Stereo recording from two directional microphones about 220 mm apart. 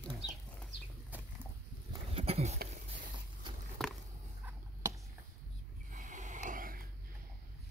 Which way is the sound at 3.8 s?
Centre (ahead or behind).